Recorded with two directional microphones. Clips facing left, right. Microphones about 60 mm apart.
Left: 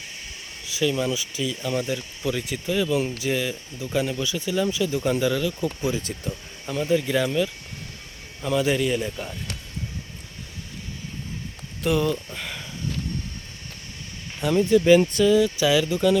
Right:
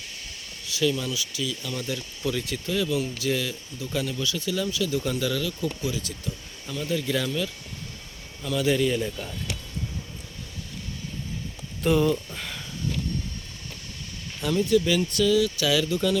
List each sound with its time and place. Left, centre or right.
0.7 s speech: centre
5.8 s speech: left
8.4 s speech: left
11.8 s speech: centre
14.4 s speech: left